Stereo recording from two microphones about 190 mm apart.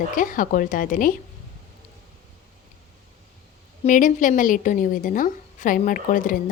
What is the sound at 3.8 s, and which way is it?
A woman's voice, 45° left (ahead or behind).